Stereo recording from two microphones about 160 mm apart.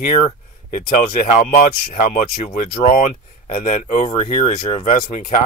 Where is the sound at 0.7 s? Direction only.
65° left (ahead or behind).